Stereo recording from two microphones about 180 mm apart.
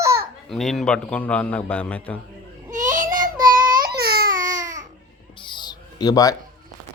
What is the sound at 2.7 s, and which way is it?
Baby cry, 45° right (ahead or behind).